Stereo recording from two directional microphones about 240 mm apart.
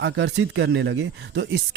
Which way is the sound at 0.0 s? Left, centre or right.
Right.